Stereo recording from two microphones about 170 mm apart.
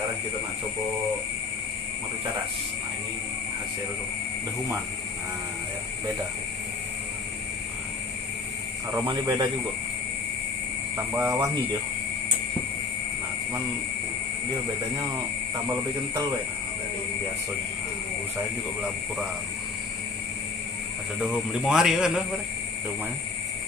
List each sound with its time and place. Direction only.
9.0 s a man's voice: 25° right (ahead or behind)
11.1 s speech: 10° right (ahead or behind)
21.2 s a man's voice: 5° right (ahead or behind)